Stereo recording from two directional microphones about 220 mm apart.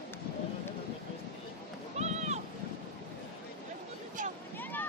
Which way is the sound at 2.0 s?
30° right (ahead or behind).